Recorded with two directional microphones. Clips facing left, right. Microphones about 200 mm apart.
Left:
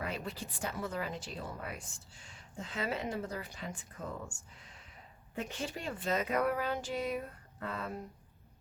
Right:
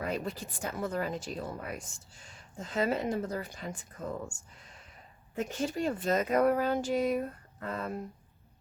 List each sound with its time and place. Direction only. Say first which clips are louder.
0.1 s speech: right 5 dB; 45° right (ahead or behind)